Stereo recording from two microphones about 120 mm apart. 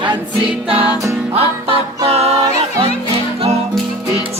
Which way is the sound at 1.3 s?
55° right (ahead or behind).